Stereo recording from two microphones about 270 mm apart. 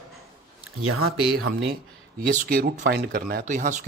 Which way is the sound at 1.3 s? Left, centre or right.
Right.